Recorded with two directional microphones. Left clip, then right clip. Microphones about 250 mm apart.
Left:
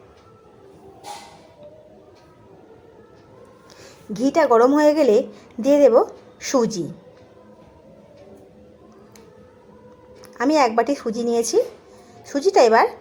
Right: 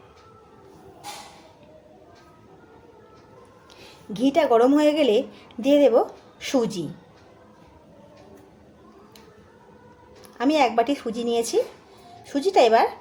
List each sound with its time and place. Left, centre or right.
4.1 s a woman's voice: centre
10.2 s speech: centre